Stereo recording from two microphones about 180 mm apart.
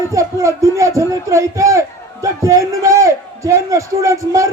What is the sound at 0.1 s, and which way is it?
A man's voice, 15° right (ahead or behind).